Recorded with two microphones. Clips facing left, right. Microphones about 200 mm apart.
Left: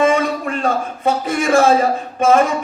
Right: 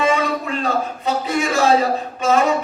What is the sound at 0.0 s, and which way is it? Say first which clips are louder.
Music: left 3 dB; 50° left (ahead or behind).